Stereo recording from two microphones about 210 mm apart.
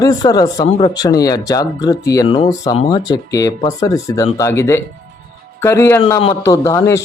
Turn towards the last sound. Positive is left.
turn(degrees=15)  # may be behind; listen again after turning